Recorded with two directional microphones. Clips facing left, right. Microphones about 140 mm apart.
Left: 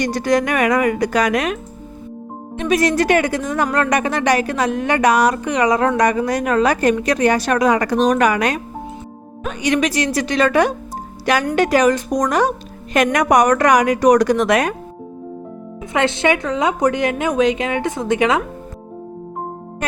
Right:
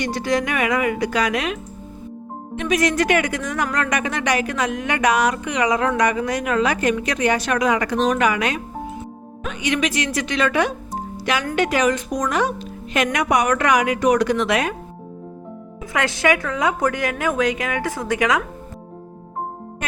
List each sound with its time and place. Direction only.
0.0 s speech: 45° left (ahead or behind)
2.6 s a woman's voice: 35° left (ahead or behind)
15.9 s a woman's voice: 25° left (ahead or behind)